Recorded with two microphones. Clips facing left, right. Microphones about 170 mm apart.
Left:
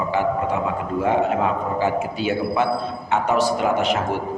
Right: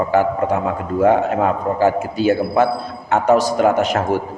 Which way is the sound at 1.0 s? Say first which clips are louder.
Right 5 dB; 45° right (ahead or behind).